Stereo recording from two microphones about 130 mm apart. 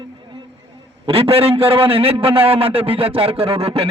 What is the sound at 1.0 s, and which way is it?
Speech, 50° right (ahead or behind).